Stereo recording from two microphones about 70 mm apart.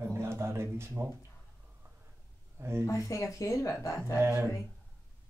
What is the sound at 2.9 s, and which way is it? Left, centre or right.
A woman's voice, left.